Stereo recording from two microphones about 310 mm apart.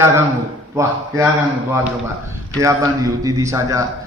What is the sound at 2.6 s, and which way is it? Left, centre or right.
A man's voice, centre.